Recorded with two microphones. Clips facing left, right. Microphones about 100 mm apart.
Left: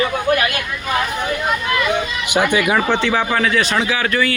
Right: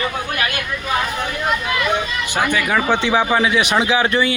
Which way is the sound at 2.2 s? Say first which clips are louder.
Left 4 dB; 15° left (ahead or behind).